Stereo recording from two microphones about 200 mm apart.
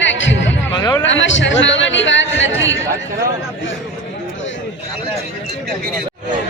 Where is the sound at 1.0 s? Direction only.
70° left (ahead or behind).